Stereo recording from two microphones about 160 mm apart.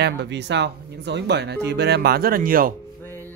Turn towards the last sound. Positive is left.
turn(degrees=15)  # may be behind; listen again after turning